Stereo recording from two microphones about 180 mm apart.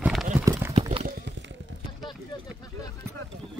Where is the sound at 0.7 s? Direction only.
35° right (ahead or behind).